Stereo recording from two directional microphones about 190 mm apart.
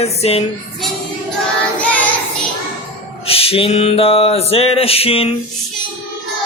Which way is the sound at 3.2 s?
30° left (ahead or behind).